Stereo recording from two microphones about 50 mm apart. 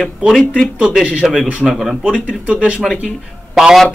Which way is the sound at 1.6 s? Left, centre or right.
Centre.